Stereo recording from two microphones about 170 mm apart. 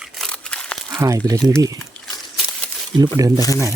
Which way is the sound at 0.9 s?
20° right (ahead or behind).